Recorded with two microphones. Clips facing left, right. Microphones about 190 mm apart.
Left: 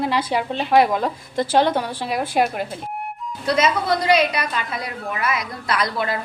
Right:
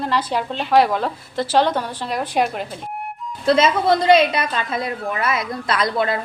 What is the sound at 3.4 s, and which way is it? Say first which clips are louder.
A woman's voice: right 4 dB; 25° right (ahead or behind).